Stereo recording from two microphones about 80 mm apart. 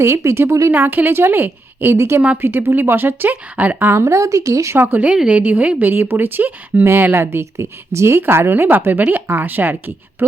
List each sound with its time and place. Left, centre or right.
0.0 s a woman's voice: right
0.7 s speech: right
4.8 s speech: right